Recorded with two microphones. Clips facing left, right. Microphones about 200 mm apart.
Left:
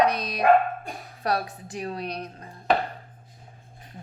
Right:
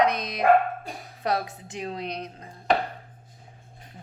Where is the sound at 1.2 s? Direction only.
20° right (ahead or behind).